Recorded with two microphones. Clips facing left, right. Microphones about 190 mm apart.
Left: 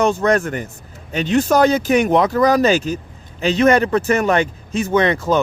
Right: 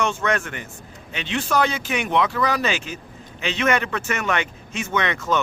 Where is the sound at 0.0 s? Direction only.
35° left (ahead or behind).